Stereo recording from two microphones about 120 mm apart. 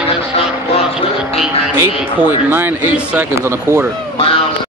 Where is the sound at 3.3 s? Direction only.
20° right (ahead or behind).